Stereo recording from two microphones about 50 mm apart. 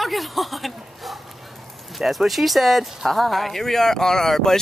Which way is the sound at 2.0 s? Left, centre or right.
Centre.